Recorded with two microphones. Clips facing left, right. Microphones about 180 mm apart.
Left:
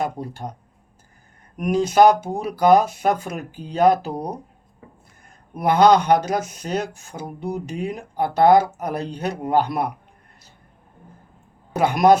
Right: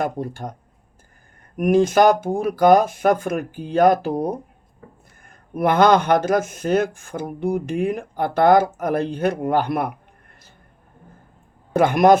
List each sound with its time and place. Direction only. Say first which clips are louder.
0.0 s speech: right 2 dB; 50° right (ahead or behind)
1.5 s speech: right 1 dB; 50° right (ahead or behind)
5.5 s speech: even; 50° right (ahead or behind)
11.7 s speech: right 2 dB; 50° right (ahead or behind)